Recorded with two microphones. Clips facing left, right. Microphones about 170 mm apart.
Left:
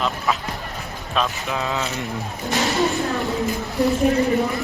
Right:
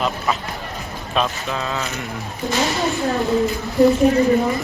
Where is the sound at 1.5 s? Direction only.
15° left (ahead or behind).